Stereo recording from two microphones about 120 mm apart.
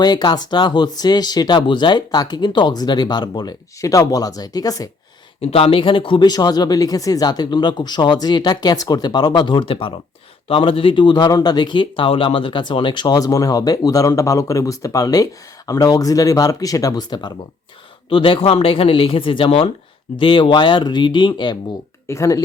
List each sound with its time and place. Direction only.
0.0 s speech: 35° left (ahead or behind)
5.4 s speech: 55° left (ahead or behind); by 17.3 s 35° left (ahead or behind)
18.1 s speech: 45° left (ahead or behind)
22.0 s speech: 25° left (ahead or behind)